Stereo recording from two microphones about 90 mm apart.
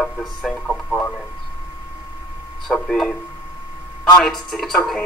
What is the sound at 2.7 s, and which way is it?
Speech, 5° left (ahead or behind).